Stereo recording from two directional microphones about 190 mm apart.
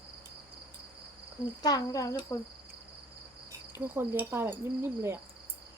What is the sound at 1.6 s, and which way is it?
Speech, 20° left (ahead or behind).